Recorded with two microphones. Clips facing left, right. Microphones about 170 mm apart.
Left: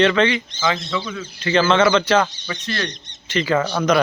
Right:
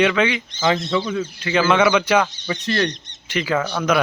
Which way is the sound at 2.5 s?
30° right (ahead or behind).